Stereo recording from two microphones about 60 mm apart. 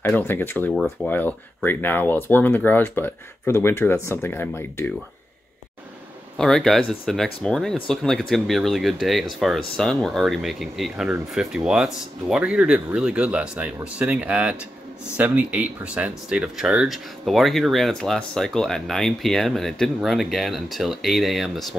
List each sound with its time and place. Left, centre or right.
0.2 s speech: left
6.3 s speech: centre
10.2 s speech: centre